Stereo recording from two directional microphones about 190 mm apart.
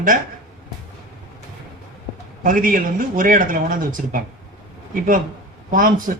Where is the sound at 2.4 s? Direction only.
45° right (ahead or behind).